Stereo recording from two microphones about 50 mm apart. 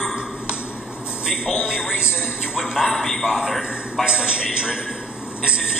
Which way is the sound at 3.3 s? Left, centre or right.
Centre.